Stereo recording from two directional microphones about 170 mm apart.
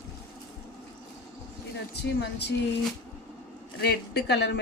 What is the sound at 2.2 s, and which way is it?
Speech, 80° left.